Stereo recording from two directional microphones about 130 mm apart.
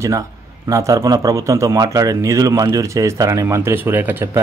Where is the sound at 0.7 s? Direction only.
25° right (ahead or behind).